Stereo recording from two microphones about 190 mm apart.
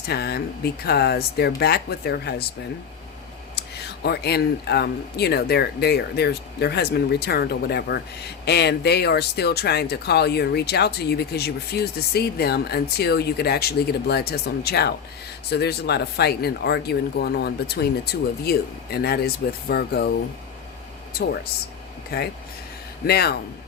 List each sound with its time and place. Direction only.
0.1 s speech: 60° left (ahead or behind)
3.5 s speech: 60° left (ahead or behind)
22.1 s speech: 55° left (ahead or behind)